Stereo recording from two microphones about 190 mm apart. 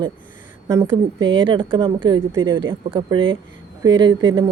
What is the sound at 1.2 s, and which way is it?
A woman's voice, 25° right (ahead or behind).